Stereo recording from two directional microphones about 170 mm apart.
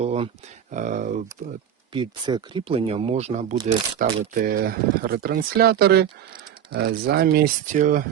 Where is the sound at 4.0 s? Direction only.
55° right (ahead or behind).